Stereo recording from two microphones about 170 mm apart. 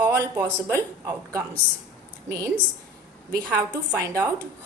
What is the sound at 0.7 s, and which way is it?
Speech, 20° right (ahead or behind).